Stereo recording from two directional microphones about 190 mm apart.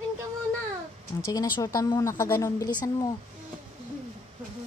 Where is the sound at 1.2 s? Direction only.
20° left (ahead or behind).